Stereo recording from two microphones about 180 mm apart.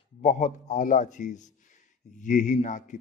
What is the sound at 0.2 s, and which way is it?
A man's voice, 40° left (ahead or behind).